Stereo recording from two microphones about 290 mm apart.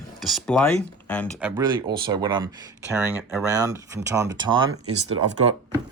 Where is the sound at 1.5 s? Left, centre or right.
Centre.